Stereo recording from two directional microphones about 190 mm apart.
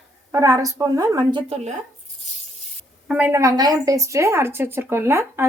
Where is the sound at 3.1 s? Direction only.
10° right (ahead or behind).